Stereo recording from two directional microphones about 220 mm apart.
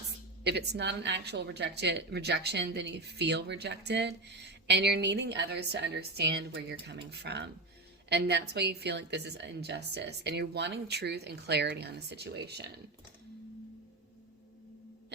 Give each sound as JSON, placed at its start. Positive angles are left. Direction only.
{"t": 0.4, "sound": "speech", "side_deg": -50}